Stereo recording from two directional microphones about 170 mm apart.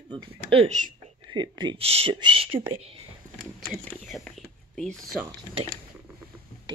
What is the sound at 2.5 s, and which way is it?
Speech, 15° right (ahead or behind).